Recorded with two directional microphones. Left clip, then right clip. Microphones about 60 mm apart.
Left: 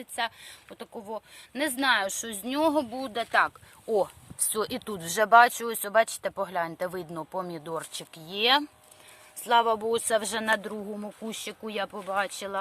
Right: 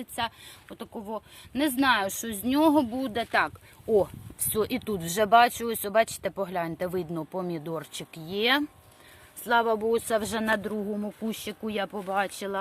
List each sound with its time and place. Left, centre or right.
0.0 s speech: left
2.4 s speech: centre
4.5 s speech: left
9.8 s speech: left
12.1 s speech: centre